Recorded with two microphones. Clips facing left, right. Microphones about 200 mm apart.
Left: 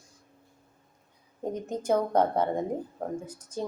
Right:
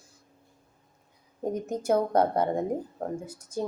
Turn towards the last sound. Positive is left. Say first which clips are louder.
# right 1 dB
turn(degrees=-10)  # may be behind; listen again after turning